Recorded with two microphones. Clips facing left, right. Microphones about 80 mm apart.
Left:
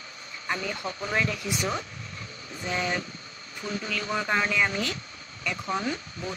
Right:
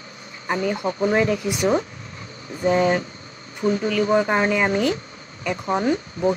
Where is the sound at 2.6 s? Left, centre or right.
Right.